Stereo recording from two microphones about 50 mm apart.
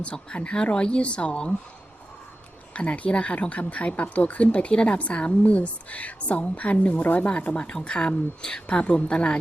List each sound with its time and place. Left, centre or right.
0.0 s a woman's voice: left
2.7 s a woman's voice: left
7.3 s a woman's voice: left
8.6 s a woman's voice: left